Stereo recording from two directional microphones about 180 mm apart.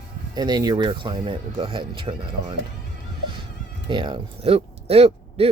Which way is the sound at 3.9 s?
25° right (ahead or behind).